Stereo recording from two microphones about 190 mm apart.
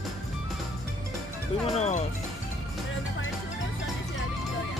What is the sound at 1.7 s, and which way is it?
Speech, 35° left (ahead or behind).